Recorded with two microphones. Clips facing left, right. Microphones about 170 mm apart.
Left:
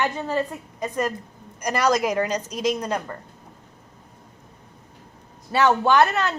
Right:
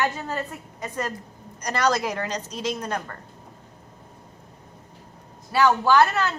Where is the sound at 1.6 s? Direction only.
10° left (ahead or behind).